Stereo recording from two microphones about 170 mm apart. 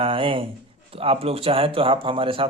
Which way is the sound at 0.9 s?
35° right (ahead or behind).